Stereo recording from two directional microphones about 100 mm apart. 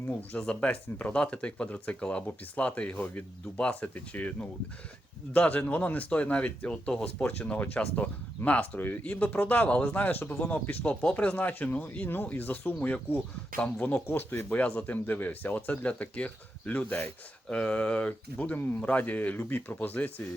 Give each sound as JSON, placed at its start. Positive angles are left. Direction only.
{"t": 0.1, "sound": "speech", "side_deg": 10}